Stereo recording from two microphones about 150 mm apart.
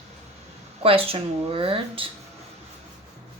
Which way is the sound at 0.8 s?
40° right (ahead or behind).